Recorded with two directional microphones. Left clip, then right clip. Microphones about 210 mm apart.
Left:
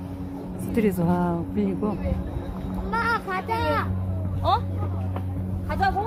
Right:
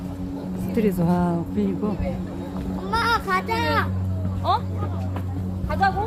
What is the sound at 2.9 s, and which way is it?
Children playing, 55° right (ahead or behind).